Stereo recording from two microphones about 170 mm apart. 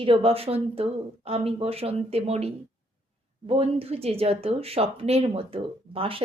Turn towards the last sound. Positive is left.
turn(degrees=-35)  # may be behind; listen again after turning